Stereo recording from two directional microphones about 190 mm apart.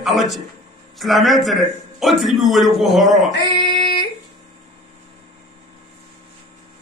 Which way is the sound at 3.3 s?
65° left (ahead or behind).